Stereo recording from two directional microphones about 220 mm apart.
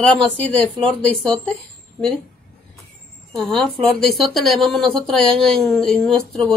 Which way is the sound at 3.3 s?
Centre (ahead or behind).